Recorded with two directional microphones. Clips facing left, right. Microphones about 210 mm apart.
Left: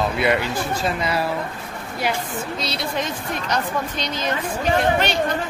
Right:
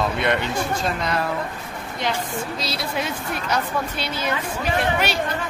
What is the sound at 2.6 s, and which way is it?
A woman's voice, 5° right (ahead or behind).